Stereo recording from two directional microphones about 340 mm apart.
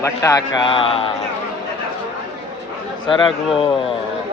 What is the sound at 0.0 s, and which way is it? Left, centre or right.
A man's voice, centre.